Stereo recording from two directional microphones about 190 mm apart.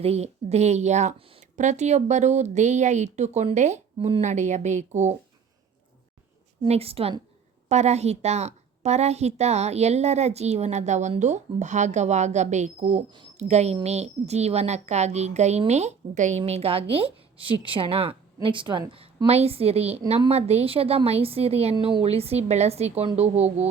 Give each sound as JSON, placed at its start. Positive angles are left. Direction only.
{"t": 0.0, "sound": "a woman's voice", "side_deg": -35}
{"t": 6.6, "sound": "a woman's voice", "side_deg": -30}